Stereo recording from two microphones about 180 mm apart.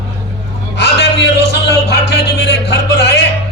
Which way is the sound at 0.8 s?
70° left (ahead or behind).